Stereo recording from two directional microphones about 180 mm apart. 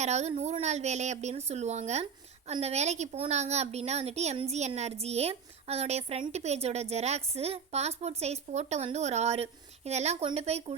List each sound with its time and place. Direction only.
0.0 s a woman's voice: 40° right (ahead or behind)